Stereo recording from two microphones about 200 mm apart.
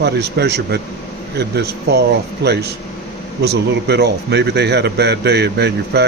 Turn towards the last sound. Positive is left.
turn(degrees=-55)  # may be behind; listen again after turning